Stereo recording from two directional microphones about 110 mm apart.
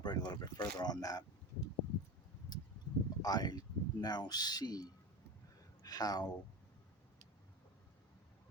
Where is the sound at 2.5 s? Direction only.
40° left (ahead or behind).